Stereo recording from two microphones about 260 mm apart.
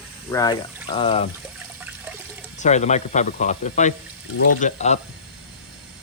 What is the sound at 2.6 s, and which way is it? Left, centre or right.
Speech, left.